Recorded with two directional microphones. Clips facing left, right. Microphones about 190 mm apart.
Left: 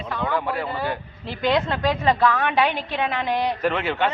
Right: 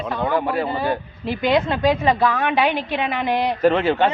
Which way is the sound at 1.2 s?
10° right (ahead or behind).